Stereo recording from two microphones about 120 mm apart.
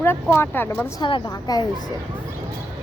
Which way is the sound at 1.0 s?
40° left (ahead or behind).